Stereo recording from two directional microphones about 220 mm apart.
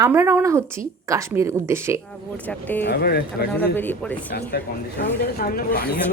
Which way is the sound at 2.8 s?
45° left (ahead or behind).